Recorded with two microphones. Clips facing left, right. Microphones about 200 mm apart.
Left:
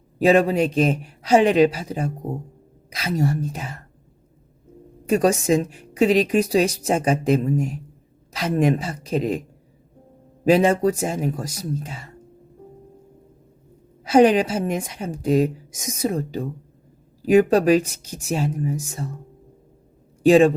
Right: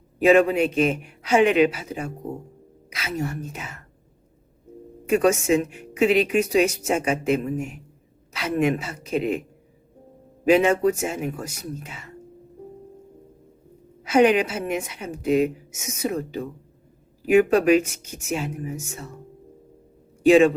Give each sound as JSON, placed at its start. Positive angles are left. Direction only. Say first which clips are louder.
{"t": 0.2, "sound": "speech", "louder": "even", "side_deg": 35}
{"t": 5.0, "sound": "speech", "louder": "left 1 dB", "side_deg": 35}
{"t": 10.5, "sound": "speech", "louder": "left 1 dB", "side_deg": 35}
{"t": 14.0, "sound": "speech", "louder": "left 3 dB", "side_deg": 35}
{"t": 20.2, "sound": "speech", "louder": "left 1 dB", "side_deg": 35}